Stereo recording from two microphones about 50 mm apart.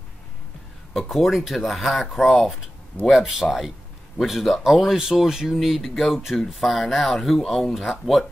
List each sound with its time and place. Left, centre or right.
0.9 s speech: centre